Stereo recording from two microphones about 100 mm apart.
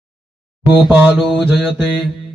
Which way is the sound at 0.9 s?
15° right (ahead or behind).